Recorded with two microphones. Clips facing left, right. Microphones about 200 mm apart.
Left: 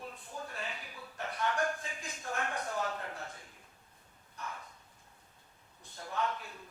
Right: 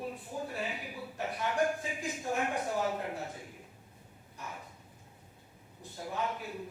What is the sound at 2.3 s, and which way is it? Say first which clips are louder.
A man's voice: right 4 dB; 15° right (ahead or behind).